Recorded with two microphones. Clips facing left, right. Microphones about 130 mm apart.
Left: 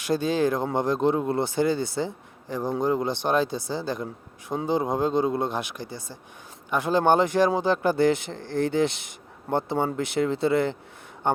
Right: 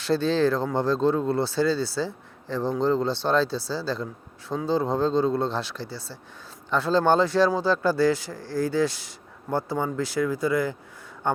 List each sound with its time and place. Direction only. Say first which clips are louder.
0.0 s speech: right 1 dB; 15° left (ahead or behind)